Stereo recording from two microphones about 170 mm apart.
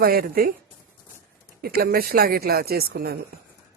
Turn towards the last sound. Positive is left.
turn(degrees=-65)  # may be behind; listen again after turning